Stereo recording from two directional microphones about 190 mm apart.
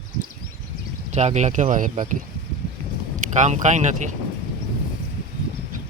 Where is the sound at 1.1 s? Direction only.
35° right (ahead or behind).